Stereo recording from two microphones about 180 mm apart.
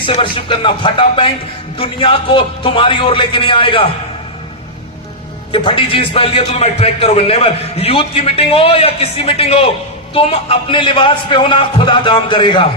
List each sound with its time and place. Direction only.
0.0 s a man's voice: 30° left (ahead or behind)
5.5 s a man's voice: 30° left (ahead or behind)